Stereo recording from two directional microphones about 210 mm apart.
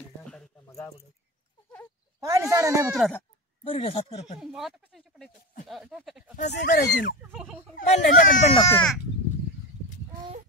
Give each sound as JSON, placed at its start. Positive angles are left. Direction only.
{"t": 0.7, "sound": "a sound", "side_deg": 15}
{"t": 2.1, "sound": "speech", "side_deg": -15}
{"t": 3.0, "sound": "speech", "side_deg": 10}
{"t": 3.6, "sound": "speech", "side_deg": 25}
{"t": 4.4, "sound": "speech", "side_deg": 0}
{"t": 6.5, "sound": "speech", "side_deg": 50}
{"t": 8.5, "sound": "speech", "side_deg": 10}